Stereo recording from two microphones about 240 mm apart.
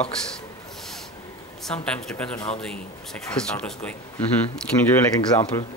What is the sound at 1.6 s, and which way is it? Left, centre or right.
Speech, centre.